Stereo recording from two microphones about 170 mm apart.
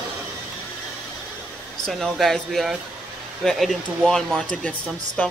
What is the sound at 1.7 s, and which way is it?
Speech, centre (ahead or behind).